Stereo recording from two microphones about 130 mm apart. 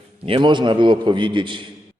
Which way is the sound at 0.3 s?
40° right (ahead or behind).